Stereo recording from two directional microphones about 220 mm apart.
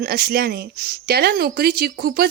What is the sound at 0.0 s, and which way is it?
Speech, 45° right (ahead or behind).